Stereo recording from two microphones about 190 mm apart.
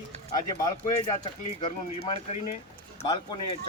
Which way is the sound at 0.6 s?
20° left (ahead or behind).